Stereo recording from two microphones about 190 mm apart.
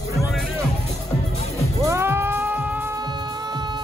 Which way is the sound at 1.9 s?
10° right (ahead or behind).